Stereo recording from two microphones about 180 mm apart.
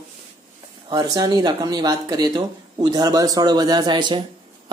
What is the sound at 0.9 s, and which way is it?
Speech, 20° right (ahead or behind).